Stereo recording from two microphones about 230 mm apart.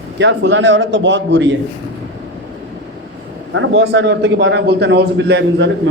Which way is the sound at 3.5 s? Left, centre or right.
Right.